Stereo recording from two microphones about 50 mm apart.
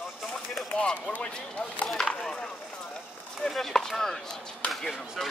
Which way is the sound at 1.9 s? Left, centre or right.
Centre.